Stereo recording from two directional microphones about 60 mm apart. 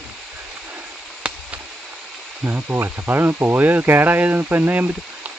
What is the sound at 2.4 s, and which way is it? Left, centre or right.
Speech, right.